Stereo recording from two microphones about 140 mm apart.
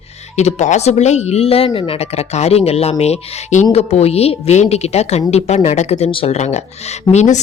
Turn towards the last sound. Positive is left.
turn(degrees=55)  # may be behind; listen again after turning